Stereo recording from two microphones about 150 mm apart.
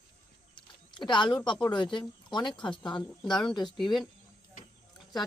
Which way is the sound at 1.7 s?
30° left (ahead or behind).